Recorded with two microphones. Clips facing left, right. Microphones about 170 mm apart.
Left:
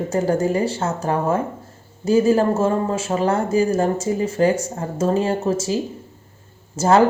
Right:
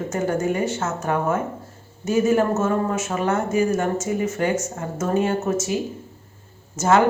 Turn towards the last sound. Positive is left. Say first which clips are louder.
# left 2 dB
turn(degrees=35)  # may be behind; listen again after turning